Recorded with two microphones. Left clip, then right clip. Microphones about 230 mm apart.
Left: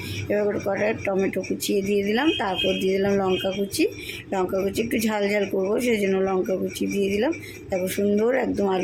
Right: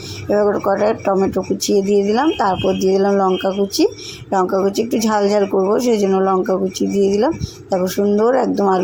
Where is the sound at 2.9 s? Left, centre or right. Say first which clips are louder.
Right 8 dB; centre.